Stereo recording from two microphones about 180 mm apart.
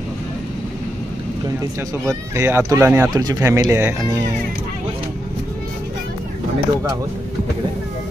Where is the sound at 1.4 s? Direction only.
20° right (ahead or behind).